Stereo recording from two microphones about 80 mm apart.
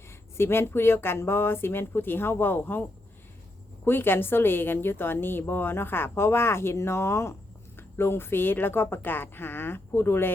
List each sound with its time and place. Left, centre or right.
0.3 s a woman's voice: left
3.8 s a woman's voice: left